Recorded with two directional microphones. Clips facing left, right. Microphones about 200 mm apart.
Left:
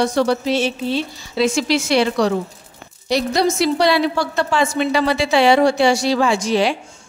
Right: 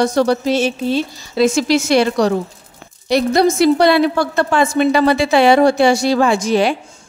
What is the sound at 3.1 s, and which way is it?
Speech, 55° right (ahead or behind).